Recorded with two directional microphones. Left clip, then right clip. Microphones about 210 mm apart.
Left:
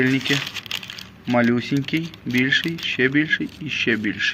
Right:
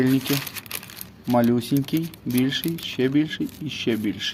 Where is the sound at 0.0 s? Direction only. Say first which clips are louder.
Left 2 dB; 15° right (ahead or behind).